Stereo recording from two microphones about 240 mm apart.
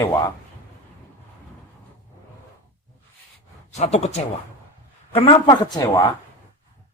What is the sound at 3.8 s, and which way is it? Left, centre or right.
Speech, left.